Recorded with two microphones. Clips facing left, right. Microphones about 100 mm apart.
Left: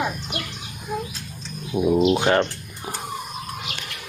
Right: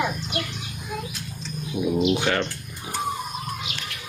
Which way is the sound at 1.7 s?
40° left (ahead or behind).